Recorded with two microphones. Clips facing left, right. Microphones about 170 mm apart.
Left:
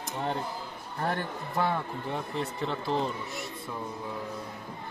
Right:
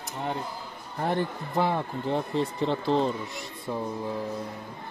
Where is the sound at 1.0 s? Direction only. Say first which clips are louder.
Right 4 dB; 20° right (ahead or behind).